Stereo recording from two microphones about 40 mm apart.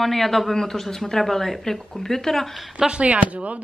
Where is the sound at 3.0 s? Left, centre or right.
Right.